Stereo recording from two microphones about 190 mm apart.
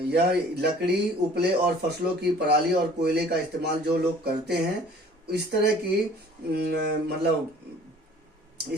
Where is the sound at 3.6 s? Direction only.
60° right (ahead or behind).